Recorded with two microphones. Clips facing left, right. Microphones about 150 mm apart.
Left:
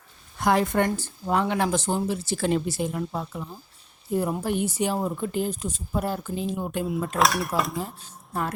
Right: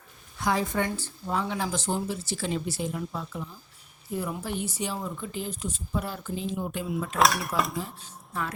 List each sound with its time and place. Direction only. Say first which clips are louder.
0.3 s a woman's voice: left 5 dB; 60° left (ahead or behind)
0.9 s speech: left 5 dB; 45° left (ahead or behind)
1.3 s speech: left 6 dB; 65° left (ahead or behind); by 7.2 s 45° left (ahead or behind)
7.2 s speech: left 1 dB; centre (ahead or behind)
7.8 s speech: left 3 dB; 40° left (ahead or behind)